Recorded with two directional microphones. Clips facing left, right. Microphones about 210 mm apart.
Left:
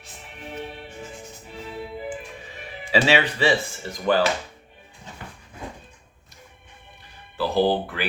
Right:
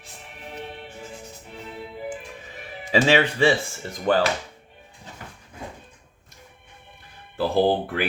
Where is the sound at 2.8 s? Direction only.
45° right (ahead or behind).